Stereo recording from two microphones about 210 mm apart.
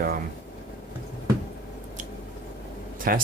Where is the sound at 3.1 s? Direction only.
45° right (ahead or behind).